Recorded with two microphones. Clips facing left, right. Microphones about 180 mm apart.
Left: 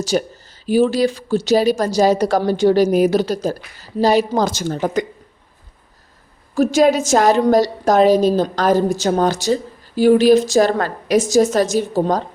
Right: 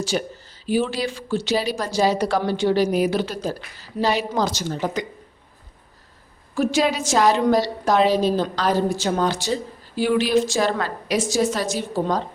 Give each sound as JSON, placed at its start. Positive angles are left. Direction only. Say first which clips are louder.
{"t": 0.0, "sound": "a woman's voice", "louder": "left 5 dB", "side_deg": 45}
{"t": 6.5, "sound": "a woman's voice", "louder": "left 7 dB", "side_deg": 40}